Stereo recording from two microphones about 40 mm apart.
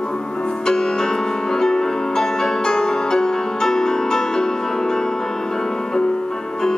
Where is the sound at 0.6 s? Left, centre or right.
Centre.